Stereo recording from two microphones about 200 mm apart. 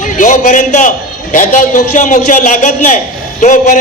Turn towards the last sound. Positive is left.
turn(degrees=40)  # may be behind; listen again after turning